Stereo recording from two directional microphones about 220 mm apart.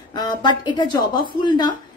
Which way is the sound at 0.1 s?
20° left (ahead or behind).